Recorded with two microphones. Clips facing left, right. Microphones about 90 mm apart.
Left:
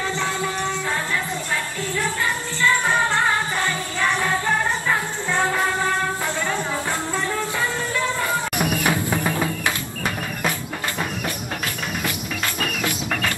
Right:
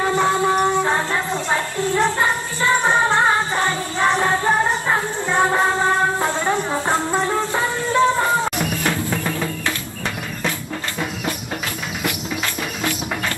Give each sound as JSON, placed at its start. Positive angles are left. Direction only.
{"t": 0.3, "sound": "shofar", "side_deg": -20}
{"t": 0.8, "sound": "a sound", "side_deg": -30}
{"t": 1.5, "sound": "a sound", "side_deg": -60}
{"t": 2.6, "sound": "music", "side_deg": -20}
{"t": 6.2, "sound": "music", "side_deg": -20}
{"t": 8.5, "sound": "drum", "side_deg": 15}